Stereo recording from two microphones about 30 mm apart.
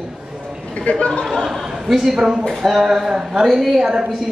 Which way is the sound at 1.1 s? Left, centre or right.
Centre.